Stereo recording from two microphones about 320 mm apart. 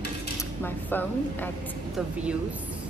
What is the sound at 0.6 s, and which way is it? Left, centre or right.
A woman's voice, centre.